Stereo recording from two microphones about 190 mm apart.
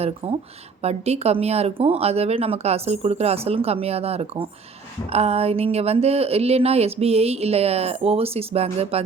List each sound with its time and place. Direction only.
0.2 s speech: 30° right (ahead or behind)